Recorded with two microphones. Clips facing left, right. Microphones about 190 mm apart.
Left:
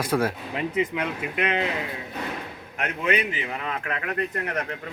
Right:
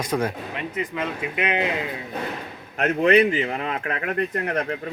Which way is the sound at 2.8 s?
40° right (ahead or behind).